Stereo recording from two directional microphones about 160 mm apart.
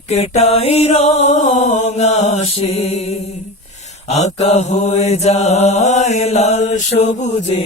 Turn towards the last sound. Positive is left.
turn(degrees=45)  # may be behind; listen again after turning